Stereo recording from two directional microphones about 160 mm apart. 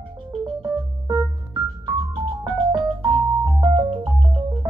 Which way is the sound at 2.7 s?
30° right (ahead or behind).